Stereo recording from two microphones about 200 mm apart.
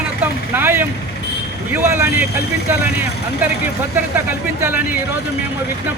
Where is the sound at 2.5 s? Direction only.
55° left (ahead or behind).